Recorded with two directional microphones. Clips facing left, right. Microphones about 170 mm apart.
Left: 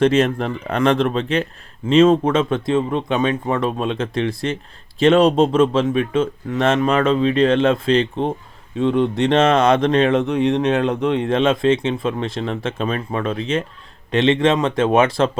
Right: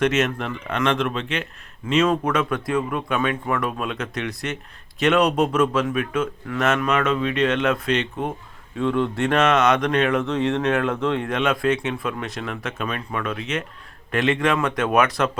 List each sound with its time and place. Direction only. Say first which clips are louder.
0.0 s speech: left 5 dB; 30° left (ahead or behind)